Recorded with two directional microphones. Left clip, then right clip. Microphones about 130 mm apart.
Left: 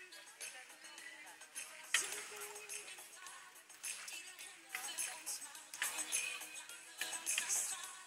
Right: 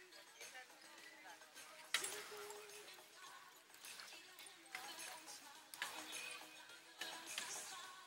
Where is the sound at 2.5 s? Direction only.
25° left (ahead or behind).